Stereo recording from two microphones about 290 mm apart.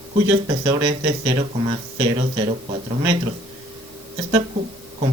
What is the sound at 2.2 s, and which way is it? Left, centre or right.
Speech, right.